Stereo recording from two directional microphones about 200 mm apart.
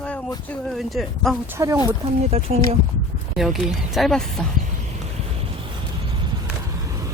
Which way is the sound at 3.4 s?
Centre (ahead or behind).